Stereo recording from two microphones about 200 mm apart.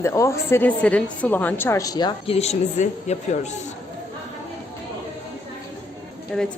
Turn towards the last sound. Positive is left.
turn(degrees=5)  # may be behind; listen again after turning